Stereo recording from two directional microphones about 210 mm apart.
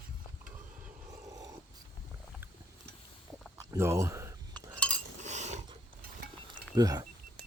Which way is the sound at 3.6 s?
15° right (ahead or behind).